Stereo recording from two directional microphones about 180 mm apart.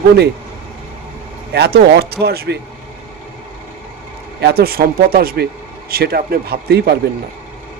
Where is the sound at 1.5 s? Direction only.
65° right (ahead or behind).